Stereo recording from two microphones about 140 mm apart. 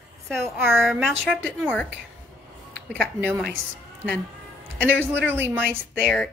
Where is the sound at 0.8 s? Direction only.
Centre (ahead or behind).